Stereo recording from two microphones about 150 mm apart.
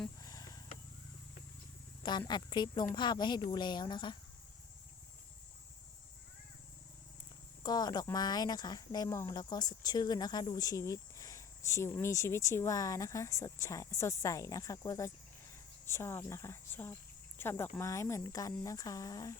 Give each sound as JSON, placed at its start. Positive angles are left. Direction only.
{"t": 0.2, "sound": "a sound", "side_deg": 25}
{"t": 2.0, "sound": "speech", "side_deg": 30}
{"t": 7.6, "sound": "cricket", "side_deg": 25}
{"t": 8.1, "sound": "speech", "side_deg": 25}